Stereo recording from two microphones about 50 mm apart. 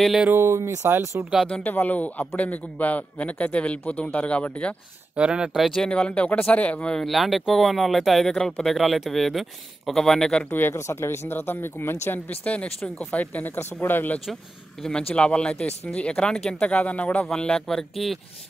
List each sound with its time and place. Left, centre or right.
0.3 s speech: right
1.1 s speech: right
1.5 s a man's voice: left
5.1 s speech: centre
5.5 s speech: centre
5.9 s a man's voice: left
7.1 s speech: centre
10.7 s speech: left
12.4 s a man's voice: left
13.7 s speech: left
14.8 s a man's voice: centre
17.6 s speech: centre